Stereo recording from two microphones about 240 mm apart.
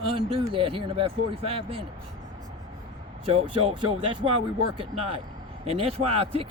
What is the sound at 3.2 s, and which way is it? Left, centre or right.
Speech, right.